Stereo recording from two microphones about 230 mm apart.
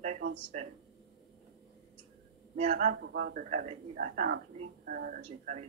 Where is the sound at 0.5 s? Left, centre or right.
Right.